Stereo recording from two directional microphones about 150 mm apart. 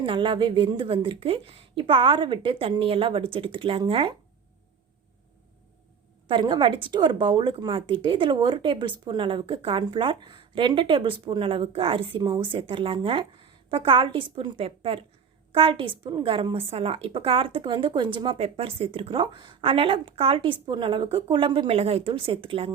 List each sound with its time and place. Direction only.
0.0 s a woman's voice: 35° right (ahead or behind)
6.2 s a woman's voice: 35° right (ahead or behind)